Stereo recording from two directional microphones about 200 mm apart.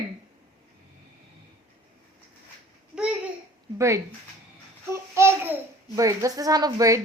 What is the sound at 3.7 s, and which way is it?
Speech, 15° right (ahead or behind).